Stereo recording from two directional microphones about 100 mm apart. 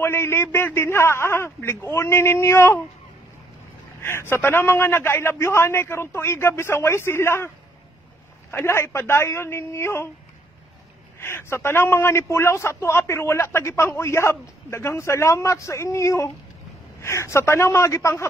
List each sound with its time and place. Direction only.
0.0 s a man's voice: 25° left (ahead or behind)
4.0 s a man's voice: 25° left (ahead or behind)
11.1 s a man's voice: 25° left (ahead or behind)